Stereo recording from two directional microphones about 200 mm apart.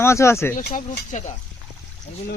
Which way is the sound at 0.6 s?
45° left (ahead or behind).